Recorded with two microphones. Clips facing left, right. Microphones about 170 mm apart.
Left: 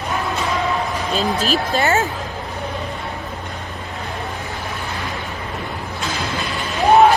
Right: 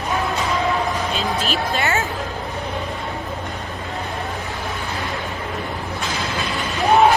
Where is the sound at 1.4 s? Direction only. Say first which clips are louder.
Left 3 dB; 35° left (ahead or behind).